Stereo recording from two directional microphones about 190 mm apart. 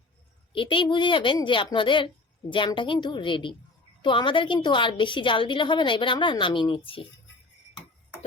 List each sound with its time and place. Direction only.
0.5 s a woman's voice: 25° left (ahead or behind)